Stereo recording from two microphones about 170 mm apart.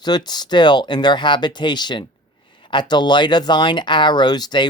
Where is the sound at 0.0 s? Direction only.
25° left (ahead or behind).